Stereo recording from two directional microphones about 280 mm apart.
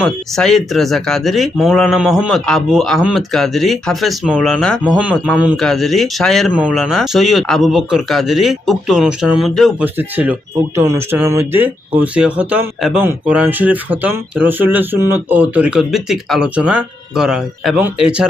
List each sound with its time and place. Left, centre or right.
0.0 s speech: centre